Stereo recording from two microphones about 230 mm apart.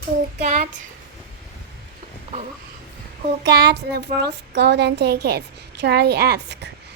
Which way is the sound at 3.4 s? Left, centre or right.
Right.